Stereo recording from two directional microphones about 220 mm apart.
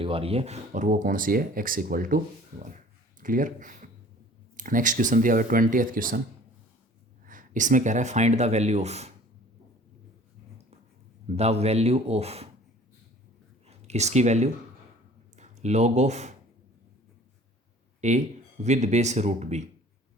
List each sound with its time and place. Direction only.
0.0 s speech: 25° right (ahead or behind)
7.3 s speech: 35° right (ahead or behind)
11.3 s a man's voice: 30° right (ahead or behind)
13.7 s speech: 30° right (ahead or behind)
18.0 s speech: 30° right (ahead or behind)